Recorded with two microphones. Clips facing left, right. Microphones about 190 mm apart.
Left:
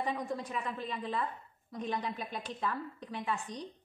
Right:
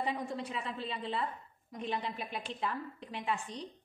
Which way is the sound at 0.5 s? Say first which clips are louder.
Left 1 dB; 30° right (ahead or behind).